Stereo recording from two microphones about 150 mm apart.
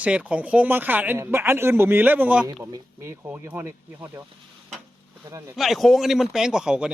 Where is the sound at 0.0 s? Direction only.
10° right (ahead or behind).